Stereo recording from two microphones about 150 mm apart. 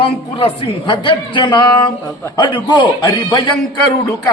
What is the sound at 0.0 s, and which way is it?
Speech, 40° left (ahead or behind).